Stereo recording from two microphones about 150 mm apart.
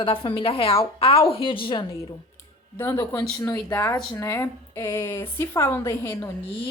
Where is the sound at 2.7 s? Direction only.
15° left (ahead or behind).